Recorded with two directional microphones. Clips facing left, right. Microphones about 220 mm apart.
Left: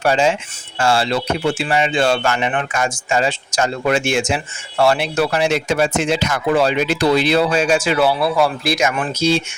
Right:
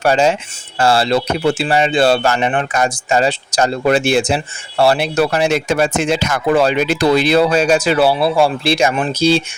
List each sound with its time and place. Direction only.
0.0 s speech: 40° right (ahead or behind)